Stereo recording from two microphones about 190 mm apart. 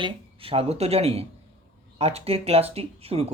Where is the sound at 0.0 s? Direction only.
30° right (ahead or behind).